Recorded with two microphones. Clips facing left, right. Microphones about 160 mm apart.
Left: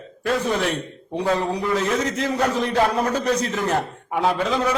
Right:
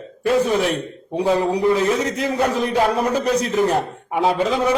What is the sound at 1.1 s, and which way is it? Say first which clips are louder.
A man's voice: right 4 dB; 10° right (ahead or behind).